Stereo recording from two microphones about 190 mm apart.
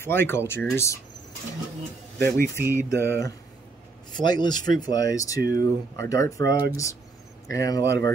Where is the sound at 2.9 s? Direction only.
15° left (ahead or behind).